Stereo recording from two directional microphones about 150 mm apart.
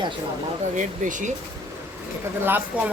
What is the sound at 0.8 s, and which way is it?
Speech, 55° right (ahead or behind).